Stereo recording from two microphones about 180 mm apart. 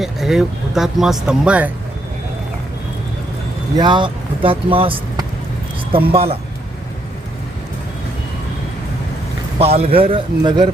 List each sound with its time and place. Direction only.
0.0 s speech: centre (ahead or behind)
3.8 s speech: 25° right (ahead or behind)
9.6 s a man's voice: 35° right (ahead or behind)